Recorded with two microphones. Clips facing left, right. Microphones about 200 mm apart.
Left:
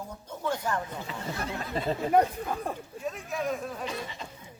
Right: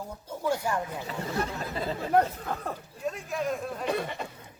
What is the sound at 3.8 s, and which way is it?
Speech, 60° right (ahead or behind).